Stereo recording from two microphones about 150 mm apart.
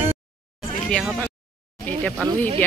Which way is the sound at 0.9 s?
Centre (ahead or behind).